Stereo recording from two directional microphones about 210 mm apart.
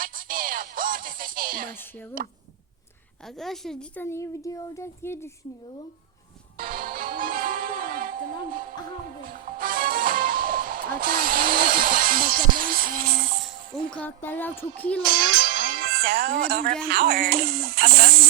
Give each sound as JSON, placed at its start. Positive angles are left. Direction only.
{"t": 0.0, "sound": "music", "side_deg": -40}
{"t": 2.2, "sound": "speech", "side_deg": -40}
{"t": 3.2, "sound": "a woman's voice", "side_deg": 0}
{"t": 6.6, "sound": "music", "side_deg": -40}
{"t": 13.4, "sound": "speech", "side_deg": 5}
{"t": 15.1, "sound": "speech", "side_deg": -20}
{"t": 15.5, "sound": "music", "side_deg": -40}
{"t": 16.9, "sound": "speech", "side_deg": -45}